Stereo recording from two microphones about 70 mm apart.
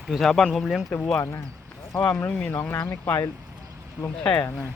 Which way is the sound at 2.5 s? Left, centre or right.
Left.